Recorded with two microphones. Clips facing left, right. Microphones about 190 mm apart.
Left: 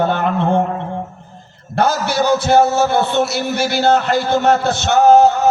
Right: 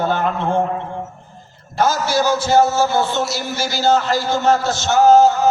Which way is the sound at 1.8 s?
60° left (ahead or behind).